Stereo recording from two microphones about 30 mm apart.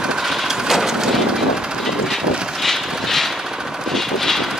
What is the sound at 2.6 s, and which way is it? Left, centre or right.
Vehicle, centre.